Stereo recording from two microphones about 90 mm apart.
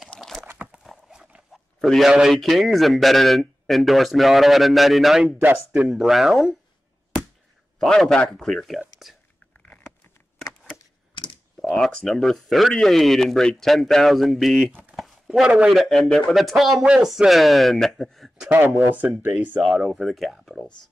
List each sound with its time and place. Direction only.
0.1 s a sound: 5° left (ahead or behind)
0.8 s horse: 5° right (ahead or behind)
1.8 s speech: centre (ahead or behind)
5.4 s speech: 20° right (ahead or behind)
5.8 s speech: centre (ahead or behind)
7.8 s speech: 5° left (ahead or behind)
11.7 s speech: 10° left (ahead or behind)
15.9 s speech: 5° left (ahead or behind)
18.5 s speech: 20° right (ahead or behind)
19.6 s speech: 5° right (ahead or behind)